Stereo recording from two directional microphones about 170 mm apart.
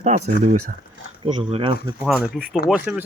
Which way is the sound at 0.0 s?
40° right (ahead or behind).